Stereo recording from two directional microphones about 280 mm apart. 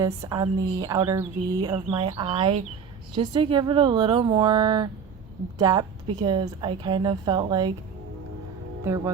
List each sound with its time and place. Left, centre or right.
0.0 s a woman's voice: centre
8.8 s a woman's voice: centre